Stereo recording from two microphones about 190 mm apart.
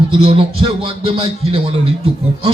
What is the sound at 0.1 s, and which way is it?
A man's voice, 30° right (ahead or behind).